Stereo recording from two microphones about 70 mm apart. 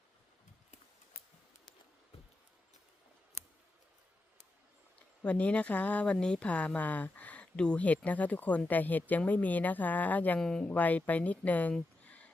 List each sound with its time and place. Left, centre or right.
5.2 s speech: centre
10.4 s speech: centre
10.7 s speech: left
12.0 s a sound: left